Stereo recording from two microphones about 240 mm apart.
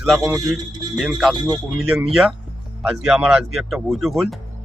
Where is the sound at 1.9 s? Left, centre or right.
Centre.